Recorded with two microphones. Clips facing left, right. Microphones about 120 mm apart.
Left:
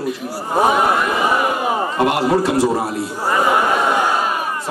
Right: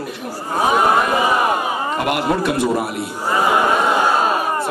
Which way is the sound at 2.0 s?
30° left (ahead or behind).